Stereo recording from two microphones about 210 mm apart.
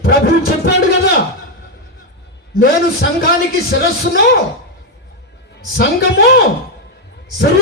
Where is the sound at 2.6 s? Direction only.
45° left (ahead or behind).